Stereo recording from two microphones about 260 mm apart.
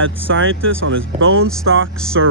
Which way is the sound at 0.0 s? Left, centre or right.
Right.